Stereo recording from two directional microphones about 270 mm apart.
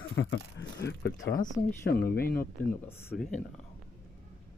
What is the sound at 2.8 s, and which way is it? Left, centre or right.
Speech, centre.